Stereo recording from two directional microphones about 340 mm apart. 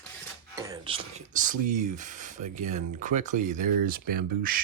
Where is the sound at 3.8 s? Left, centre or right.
Right.